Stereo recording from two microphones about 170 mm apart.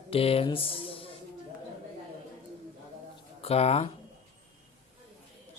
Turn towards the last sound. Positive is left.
turn(degrees=35)  # may be behind; listen again after turning